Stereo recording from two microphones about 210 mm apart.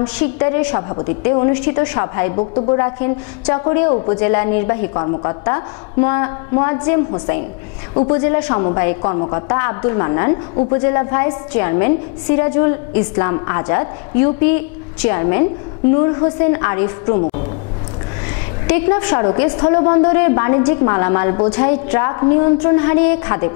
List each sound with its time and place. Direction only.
0.2 s a woman's voice: 10° left (ahead or behind)
0.7 s a woman's voice: 25° left (ahead or behind)
2.5 s a woman's voice: 30° left (ahead or behind)
18.7 s a woman's voice: 15° left (ahead or behind)